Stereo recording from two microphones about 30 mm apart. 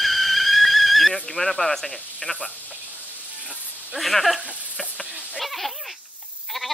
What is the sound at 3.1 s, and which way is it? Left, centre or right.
Hiss, right.